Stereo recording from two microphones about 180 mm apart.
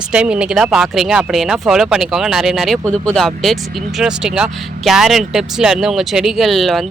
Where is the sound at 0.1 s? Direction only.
5° right (ahead or behind).